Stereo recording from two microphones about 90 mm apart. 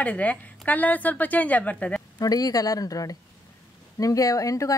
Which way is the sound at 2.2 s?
45° left (ahead or behind).